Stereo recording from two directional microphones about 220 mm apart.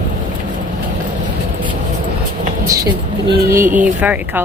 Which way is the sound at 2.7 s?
15° right (ahead or behind).